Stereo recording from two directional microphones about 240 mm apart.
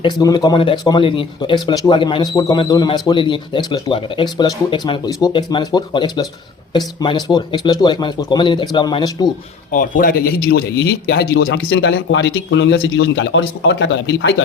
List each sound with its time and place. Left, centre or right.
0.0 s speech: centre
9.7 s a man's voice: left